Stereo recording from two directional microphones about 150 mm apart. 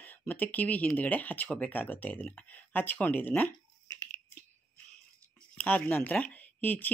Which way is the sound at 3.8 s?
25° left (ahead or behind).